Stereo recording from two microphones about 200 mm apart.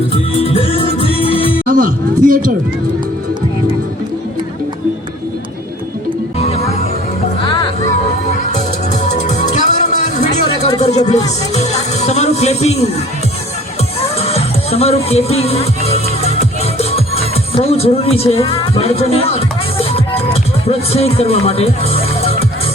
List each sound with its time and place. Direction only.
0.1 s music: 30° left (ahead or behind)
1.7 s speech: 45° right (ahead or behind)
7.4 s music: 25° left (ahead or behind)
8.5 s music: 35° left (ahead or behind)
10.9 s speech: 35° left (ahead or behind)
14.2 s music: 30° left (ahead or behind)